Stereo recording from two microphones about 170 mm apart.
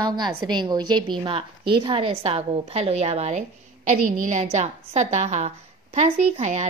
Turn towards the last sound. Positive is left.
turn(degrees=-45)  # may be behind; listen again after turning